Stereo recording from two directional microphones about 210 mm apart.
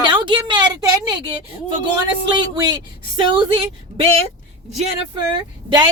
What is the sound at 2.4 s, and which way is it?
A woman's voice, 20° right (ahead or behind).